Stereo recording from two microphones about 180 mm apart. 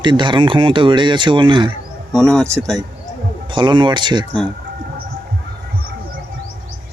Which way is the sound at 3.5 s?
25° right (ahead or behind).